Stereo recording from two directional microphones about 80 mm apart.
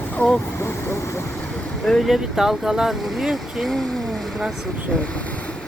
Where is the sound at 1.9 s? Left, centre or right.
Centre.